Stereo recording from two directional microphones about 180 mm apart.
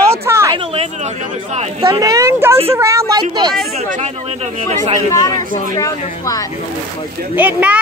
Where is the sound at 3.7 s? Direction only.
35° right (ahead or behind).